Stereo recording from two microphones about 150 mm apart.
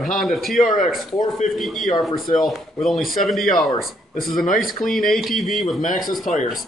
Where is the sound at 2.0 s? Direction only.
Centre (ahead or behind).